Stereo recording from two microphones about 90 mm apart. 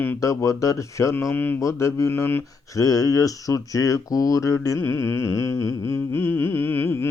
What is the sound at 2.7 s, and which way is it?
Speech, 40° left (ahead or behind).